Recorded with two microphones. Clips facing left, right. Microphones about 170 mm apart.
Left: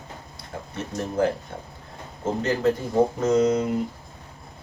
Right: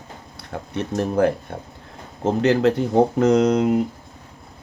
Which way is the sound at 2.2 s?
75° right (ahead or behind).